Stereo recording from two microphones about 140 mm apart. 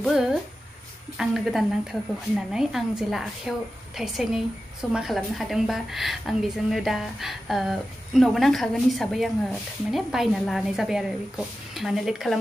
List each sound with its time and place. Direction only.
0.0 s a woman's voice: 5° right (ahead or behind)